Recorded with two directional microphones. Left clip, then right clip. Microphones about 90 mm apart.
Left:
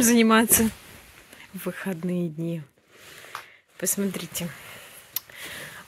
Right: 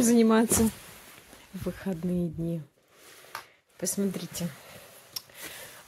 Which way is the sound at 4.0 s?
15° right (ahead or behind).